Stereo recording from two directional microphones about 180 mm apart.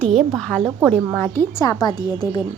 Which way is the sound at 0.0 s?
Centre (ahead or behind).